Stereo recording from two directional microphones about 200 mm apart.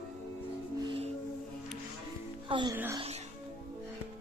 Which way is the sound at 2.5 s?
25° right (ahead or behind).